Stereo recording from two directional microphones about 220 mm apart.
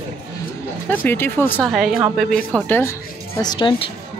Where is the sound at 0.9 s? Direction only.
10° left (ahead or behind).